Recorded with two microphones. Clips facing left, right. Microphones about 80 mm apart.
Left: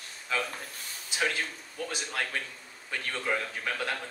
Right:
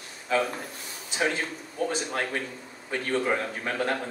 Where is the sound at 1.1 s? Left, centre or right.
Right.